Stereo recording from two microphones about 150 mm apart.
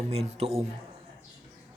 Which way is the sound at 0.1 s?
45° right (ahead or behind).